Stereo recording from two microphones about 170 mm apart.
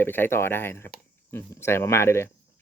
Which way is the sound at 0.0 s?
10° left (ahead or behind).